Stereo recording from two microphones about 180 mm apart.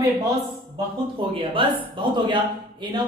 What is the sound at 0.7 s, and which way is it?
Speech, 25° right (ahead or behind).